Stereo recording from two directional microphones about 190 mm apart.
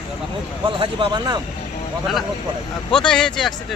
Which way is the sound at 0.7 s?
25° right (ahead or behind).